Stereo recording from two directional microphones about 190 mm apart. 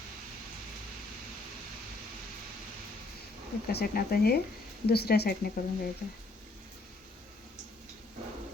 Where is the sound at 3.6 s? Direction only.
55° left (ahead or behind).